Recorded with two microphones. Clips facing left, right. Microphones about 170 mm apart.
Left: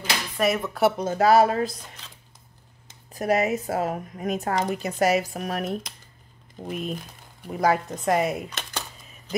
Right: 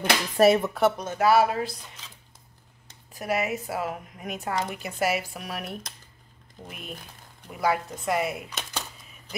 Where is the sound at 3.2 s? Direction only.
40° left (ahead or behind).